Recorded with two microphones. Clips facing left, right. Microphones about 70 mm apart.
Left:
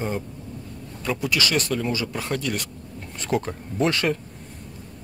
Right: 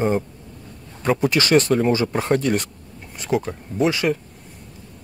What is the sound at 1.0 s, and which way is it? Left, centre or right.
Speech, right.